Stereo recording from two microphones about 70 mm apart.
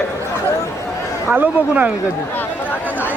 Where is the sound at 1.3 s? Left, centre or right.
Centre.